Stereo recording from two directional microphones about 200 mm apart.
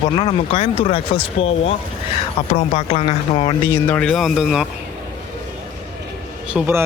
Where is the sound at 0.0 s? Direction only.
25° left (ahead or behind).